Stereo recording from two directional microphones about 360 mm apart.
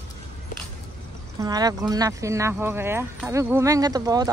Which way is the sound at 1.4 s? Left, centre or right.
Centre.